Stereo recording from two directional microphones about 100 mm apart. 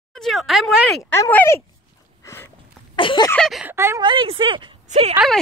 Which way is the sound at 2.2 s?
25° left (ahead or behind).